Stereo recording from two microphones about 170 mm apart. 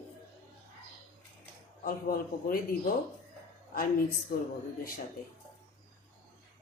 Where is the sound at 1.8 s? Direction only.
55° left (ahead or behind).